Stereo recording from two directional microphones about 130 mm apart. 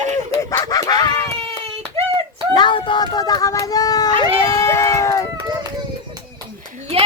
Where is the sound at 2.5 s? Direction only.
35° left (ahead or behind).